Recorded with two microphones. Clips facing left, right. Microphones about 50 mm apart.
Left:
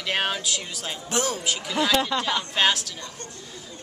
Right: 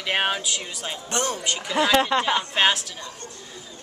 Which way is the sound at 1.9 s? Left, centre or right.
Right.